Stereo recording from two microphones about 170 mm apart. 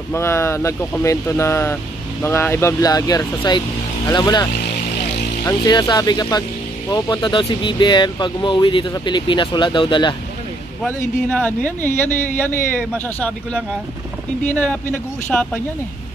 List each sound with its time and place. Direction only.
0.1 s speech: 15° left (ahead or behind)
10.9 s speech: 10° left (ahead or behind)